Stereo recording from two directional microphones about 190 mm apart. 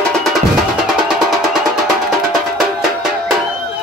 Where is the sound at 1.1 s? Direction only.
5° right (ahead or behind).